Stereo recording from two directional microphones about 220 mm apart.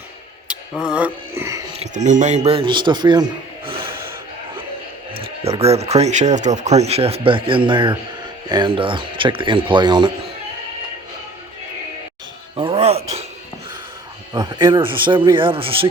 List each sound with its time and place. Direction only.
0.9 s speech: 5° right (ahead or behind)
1.7 s a man's voice: 30° right (ahead or behind)
5.1 s speech: 25° right (ahead or behind)
12.5 s music: 25° right (ahead or behind)
14.3 s speech: 20° right (ahead or behind)